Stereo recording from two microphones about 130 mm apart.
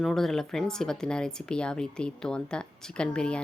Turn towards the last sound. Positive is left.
turn(degrees=5)  # may be behind; listen again after turning